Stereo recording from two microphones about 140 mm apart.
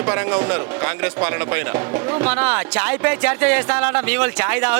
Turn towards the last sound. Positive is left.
turn(degrees=-10)  # may be behind; listen again after turning